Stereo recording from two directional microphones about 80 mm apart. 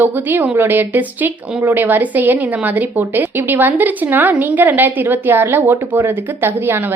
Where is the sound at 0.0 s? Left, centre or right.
Right.